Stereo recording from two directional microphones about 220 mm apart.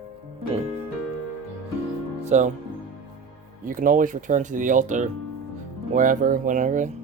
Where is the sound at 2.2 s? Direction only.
30° right (ahead or behind).